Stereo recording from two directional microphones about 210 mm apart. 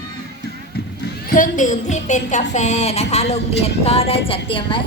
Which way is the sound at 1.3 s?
40° left (ahead or behind).